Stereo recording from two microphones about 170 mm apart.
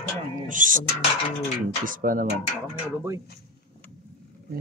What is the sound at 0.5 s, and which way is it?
Speech, 50° right (ahead or behind).